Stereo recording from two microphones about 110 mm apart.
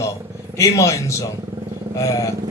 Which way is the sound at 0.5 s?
25° left (ahead or behind).